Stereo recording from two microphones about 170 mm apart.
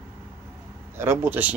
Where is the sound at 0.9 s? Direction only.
15° right (ahead or behind).